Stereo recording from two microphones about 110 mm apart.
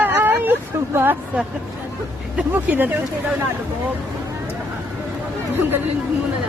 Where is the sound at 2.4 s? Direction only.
15° right (ahead or behind).